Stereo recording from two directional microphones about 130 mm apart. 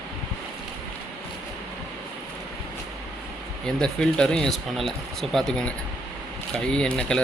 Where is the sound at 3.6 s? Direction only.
5° left (ahead or behind).